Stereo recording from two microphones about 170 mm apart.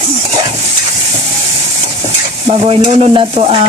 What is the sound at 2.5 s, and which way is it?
Stir, 35° right (ahead or behind).